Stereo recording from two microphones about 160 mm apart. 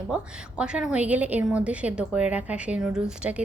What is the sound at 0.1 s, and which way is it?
A woman's voice, 5° right (ahead or behind).